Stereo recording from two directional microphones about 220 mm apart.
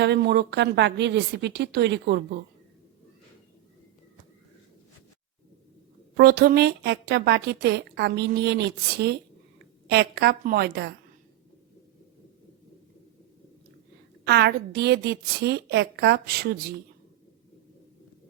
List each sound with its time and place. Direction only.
0.0 s a woman's voice: 50° right (ahead or behind)
6.1 s a woman's voice: 45° right (ahead or behind)
14.3 s a woman's voice: 50° right (ahead or behind)